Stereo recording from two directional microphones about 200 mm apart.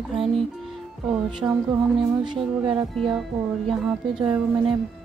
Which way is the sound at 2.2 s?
25° right (ahead or behind).